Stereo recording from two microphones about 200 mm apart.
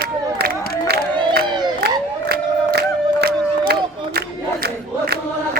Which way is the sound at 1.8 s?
55° right (ahead or behind).